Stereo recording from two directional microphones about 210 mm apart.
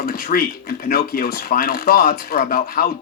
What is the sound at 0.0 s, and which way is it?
Speech, 45° left (ahead or behind).